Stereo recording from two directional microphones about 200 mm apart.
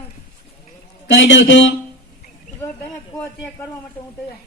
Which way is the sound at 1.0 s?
65° left (ahead or behind).